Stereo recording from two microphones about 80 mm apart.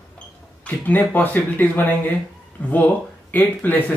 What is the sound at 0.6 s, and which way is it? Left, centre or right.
Speech, centre.